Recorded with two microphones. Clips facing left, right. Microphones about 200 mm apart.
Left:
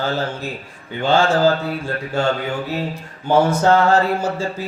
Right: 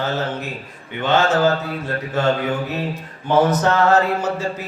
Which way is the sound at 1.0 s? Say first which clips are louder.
Left 1 dB; 30° left (ahead or behind).